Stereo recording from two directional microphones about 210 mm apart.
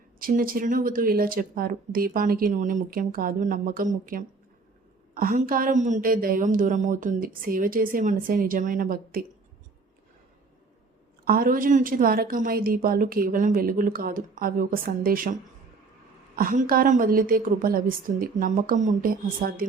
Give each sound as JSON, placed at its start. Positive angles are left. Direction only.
{"t": 0.2, "sound": "a woman's voice", "side_deg": -40}
{"t": 11.3, "sound": "a woman's voice", "side_deg": -45}